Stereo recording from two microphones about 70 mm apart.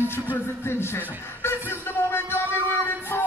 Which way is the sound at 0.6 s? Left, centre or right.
Left.